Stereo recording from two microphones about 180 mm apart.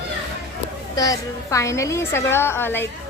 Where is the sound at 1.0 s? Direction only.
20° left (ahead or behind).